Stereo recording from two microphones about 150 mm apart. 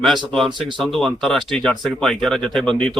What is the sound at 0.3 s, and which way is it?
A man's voice, 5° left (ahead or behind).